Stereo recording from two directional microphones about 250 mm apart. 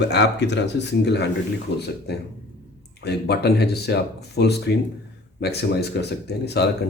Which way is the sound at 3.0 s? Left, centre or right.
Left.